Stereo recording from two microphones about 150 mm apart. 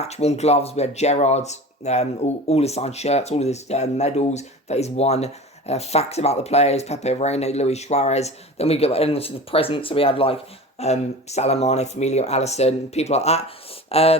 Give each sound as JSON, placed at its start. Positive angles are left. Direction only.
{"t": 0.0, "sound": "speech", "side_deg": 45}